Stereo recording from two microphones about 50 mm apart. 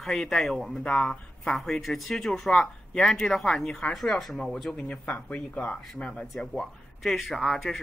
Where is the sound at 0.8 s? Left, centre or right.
Centre.